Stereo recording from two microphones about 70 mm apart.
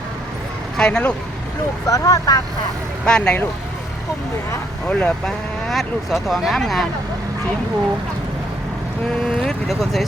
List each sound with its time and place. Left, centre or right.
0.8 s speech: centre
1.9 s speech: left
3.1 s speech: centre
4.9 s speech: centre
5.6 s speech: centre
9.2 s speech: centre